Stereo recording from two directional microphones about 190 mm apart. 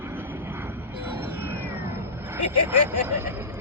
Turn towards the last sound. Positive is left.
turn(degrees=-10)  # may be behind; listen again after turning